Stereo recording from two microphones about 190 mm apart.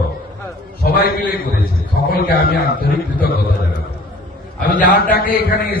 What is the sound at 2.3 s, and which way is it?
Speech, 50° left (ahead or behind).